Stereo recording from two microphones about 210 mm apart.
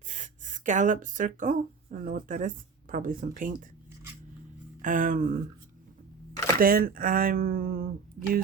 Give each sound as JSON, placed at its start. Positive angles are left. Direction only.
{"t": 0.1, "sound": "speech", "side_deg": -35}
{"t": 4.8, "sound": "speech", "side_deg": -40}
{"t": 6.6, "sound": "speech", "side_deg": -45}